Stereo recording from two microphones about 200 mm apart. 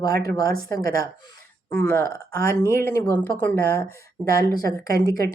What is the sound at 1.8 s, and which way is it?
Speech, 10° left (ahead or behind).